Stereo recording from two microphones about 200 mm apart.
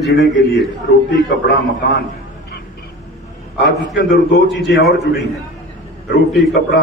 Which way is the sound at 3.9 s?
55° left (ahead or behind).